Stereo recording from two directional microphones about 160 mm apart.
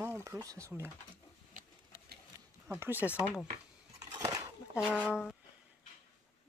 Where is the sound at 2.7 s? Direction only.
15° right (ahead or behind).